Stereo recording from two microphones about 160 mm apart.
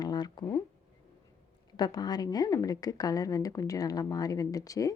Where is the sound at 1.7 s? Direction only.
25° left (ahead or behind).